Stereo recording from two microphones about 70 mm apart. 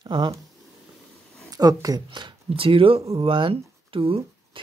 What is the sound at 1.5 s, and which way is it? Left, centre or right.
Speech, right.